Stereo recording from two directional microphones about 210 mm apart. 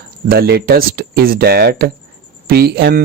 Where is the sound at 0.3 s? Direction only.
45° right (ahead or behind).